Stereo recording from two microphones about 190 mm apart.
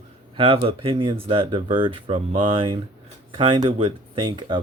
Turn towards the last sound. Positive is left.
turn(degrees=-25)  # may be behind; listen again after turning